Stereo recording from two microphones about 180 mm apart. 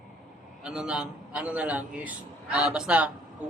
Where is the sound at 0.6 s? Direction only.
5° right (ahead or behind).